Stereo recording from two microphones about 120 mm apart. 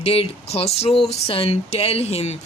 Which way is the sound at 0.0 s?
55° left (ahead or behind).